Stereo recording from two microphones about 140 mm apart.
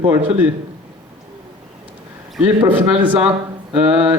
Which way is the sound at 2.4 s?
10° right (ahead or behind).